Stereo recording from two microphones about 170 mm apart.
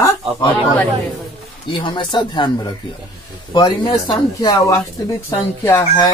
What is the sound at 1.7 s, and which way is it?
A man's voice, 30° left (ahead or behind).